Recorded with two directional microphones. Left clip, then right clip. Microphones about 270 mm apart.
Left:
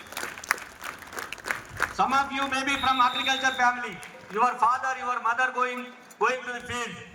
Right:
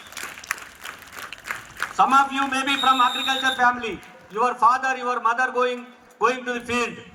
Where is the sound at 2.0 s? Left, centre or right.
Centre.